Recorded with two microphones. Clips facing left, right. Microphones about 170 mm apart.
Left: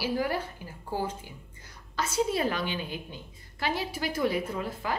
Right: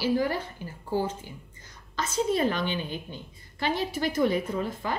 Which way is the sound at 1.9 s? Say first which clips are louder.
Right 1 dB; 10° left (ahead or behind).